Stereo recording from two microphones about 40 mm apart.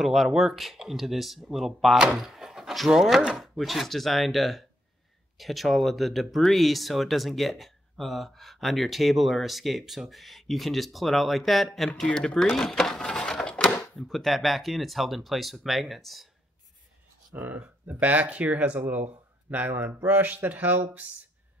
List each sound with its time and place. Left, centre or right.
0.0 s speech: centre
2.1 s a sound: centre
2.9 s speech: centre
3.5 s speech: centre
12.0 s speech: centre
12.4 s cash register: centre
13.5 s a sound: left
13.9 s speech: centre
14.2 s speech: centre
17.3 s speech: right
17.9 s speech: right